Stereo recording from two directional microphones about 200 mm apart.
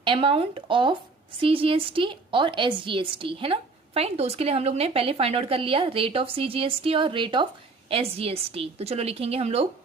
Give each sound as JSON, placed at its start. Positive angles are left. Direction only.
{"t": 0.0, "sound": "a woman's voice", "side_deg": -25}